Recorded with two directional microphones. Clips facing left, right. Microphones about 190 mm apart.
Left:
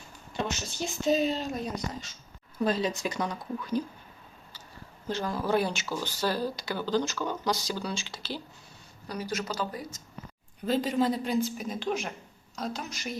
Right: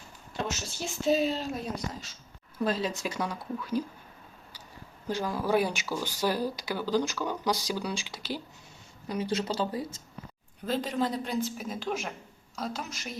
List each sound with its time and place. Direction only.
0.3 s speech: 5° right (ahead or behind)
5.0 s speech: 10° right (ahead or behind)
9.0 s speech: 25° right (ahead or behind)
10.7 s speech: centre (ahead or behind)